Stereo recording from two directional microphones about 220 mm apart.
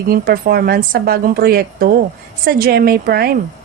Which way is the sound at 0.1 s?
45° right (ahead or behind).